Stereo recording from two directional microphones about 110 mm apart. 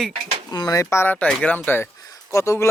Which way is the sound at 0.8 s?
25° left (ahead or behind).